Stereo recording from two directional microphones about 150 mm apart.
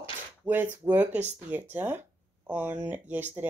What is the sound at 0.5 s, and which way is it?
Speech, 10° right (ahead or behind).